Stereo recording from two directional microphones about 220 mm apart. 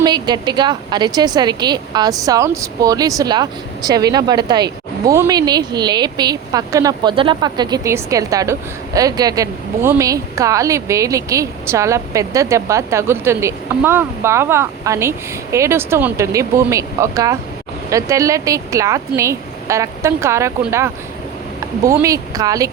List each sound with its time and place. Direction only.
0.0 s a woman's voice: 20° right (ahead or behind)